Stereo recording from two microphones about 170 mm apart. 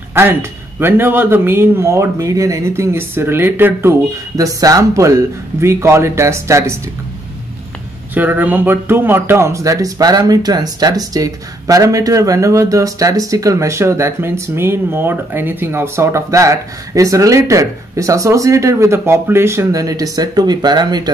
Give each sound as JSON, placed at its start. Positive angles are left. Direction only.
{"t": 0.1, "sound": "a man's voice", "side_deg": -15}
{"t": 8.1, "sound": "speech", "side_deg": -10}